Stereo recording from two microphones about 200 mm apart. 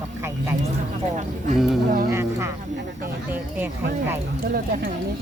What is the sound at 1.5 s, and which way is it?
Speech, centre (ahead or behind).